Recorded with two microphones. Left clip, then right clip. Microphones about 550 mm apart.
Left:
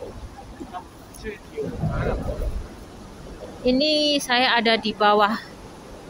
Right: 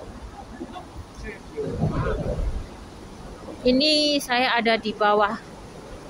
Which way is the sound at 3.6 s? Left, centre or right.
Left.